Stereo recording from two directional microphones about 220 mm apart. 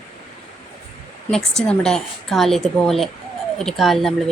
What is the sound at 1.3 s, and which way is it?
Speech, centre (ahead or behind).